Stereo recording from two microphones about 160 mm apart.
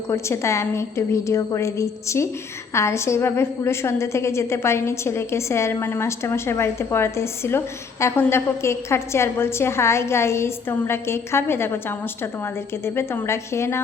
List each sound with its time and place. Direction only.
0.1 s a woman's voice: 15° left (ahead or behind)